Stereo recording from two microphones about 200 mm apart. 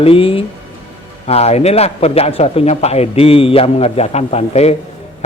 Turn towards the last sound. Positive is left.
turn(degrees=30)  # may be behind; listen again after turning